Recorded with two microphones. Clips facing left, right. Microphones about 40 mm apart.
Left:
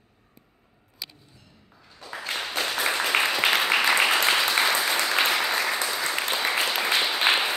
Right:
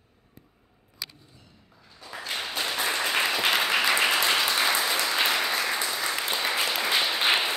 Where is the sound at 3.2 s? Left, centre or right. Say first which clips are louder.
Left 1 dB; centre.